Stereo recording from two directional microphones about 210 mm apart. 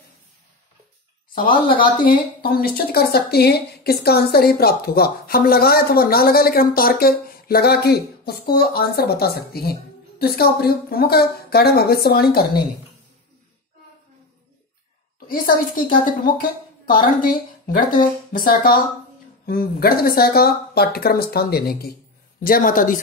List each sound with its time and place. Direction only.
2.0 s speech: 45° left (ahead or behind)
15.2 s a woman's voice: 40° left (ahead or behind)